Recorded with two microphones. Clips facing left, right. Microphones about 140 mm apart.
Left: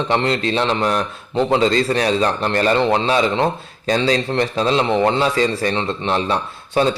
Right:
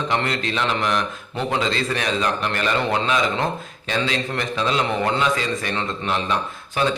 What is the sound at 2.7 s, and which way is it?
Speech, 25° left (ahead or behind).